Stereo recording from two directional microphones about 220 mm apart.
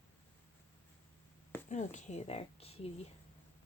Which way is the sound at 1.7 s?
30° left (ahead or behind).